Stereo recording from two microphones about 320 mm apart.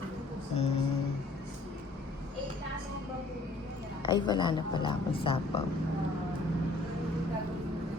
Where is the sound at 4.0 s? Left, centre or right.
Centre.